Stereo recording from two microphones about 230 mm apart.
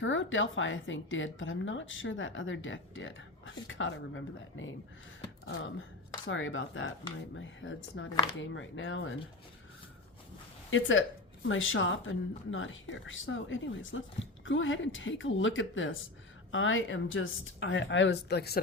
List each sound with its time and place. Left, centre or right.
0.0 s a woman's voice: left
6.2 s a woman's voice: left
10.7 s a woman's voice: left